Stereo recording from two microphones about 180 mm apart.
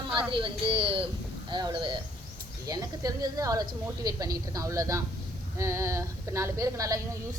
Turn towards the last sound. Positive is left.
turn(degrees=-20)  # may be behind; listen again after turning